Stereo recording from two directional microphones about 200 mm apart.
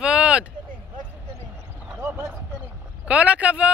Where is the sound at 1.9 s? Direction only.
10° right (ahead or behind).